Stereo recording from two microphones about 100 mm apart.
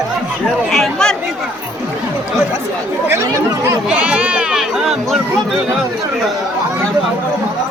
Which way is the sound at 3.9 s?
10° right (ahead or behind).